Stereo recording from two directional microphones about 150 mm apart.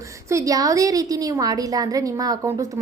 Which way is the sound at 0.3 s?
20° right (ahead or behind).